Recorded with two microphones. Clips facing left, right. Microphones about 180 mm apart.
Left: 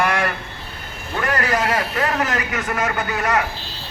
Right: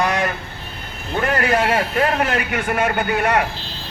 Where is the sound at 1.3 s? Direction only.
25° right (ahead or behind).